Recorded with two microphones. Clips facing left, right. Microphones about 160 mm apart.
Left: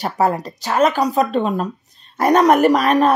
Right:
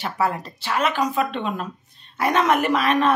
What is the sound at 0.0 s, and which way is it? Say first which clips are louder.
Speech: left 5 dB; 40° left (ahead or behind).